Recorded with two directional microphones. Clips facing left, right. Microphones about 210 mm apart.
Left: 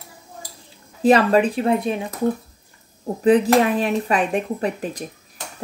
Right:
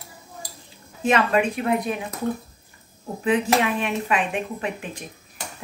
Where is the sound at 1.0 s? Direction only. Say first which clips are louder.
Left 5 dB; 35° left (ahead or behind).